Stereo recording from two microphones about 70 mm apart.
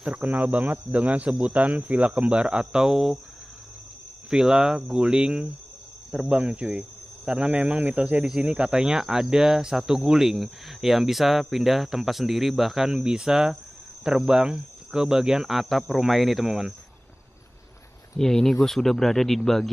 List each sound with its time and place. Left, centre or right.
0.0 s speech: right; by 3.2 s centre
4.3 s speech: centre
18.1 s speech: centre